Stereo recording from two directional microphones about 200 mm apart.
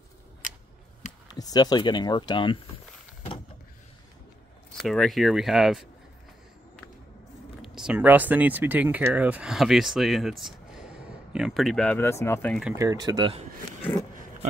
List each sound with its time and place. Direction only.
1.3 s speech: 20° left (ahead or behind)
4.7 s speech: centre (ahead or behind)
7.6 s speech: 5° right (ahead or behind)
12.7 s speech: 15° right (ahead or behind)